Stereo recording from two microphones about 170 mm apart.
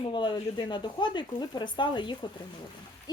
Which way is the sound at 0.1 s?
25° left (ahead or behind).